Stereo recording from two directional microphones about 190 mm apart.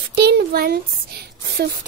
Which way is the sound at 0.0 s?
60° right (ahead or behind).